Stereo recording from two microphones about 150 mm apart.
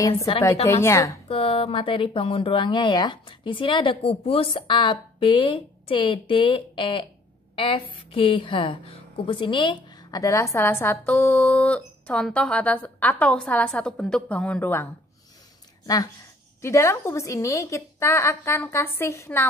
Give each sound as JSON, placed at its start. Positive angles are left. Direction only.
{"t": 0.8, "sound": "a woman's voice", "side_deg": 20}
{"t": 1.3, "sound": "a woman's voice", "side_deg": 40}
{"t": 16.6, "sound": "a woman's voice", "side_deg": 20}